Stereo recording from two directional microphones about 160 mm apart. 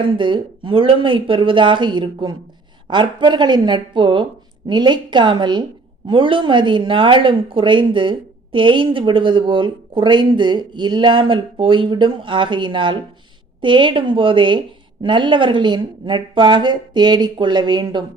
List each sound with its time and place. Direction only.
0.0 s a woman's voice: 30° right (ahead or behind)